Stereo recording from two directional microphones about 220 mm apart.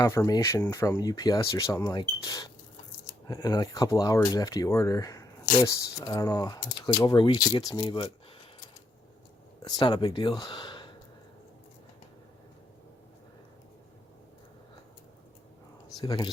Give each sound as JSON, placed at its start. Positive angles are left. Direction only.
{"t": 0.0, "sound": "speech", "side_deg": 15}
{"t": 9.6, "sound": "speech", "side_deg": 20}
{"t": 16.0, "sound": "speech", "side_deg": 15}